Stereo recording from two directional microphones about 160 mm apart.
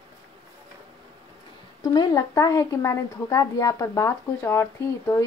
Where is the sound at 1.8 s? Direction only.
25° left (ahead or behind).